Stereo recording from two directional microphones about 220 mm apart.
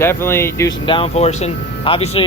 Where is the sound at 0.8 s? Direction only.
25° left (ahead or behind).